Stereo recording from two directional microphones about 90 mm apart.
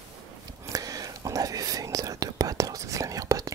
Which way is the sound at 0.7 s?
40° right (ahead or behind).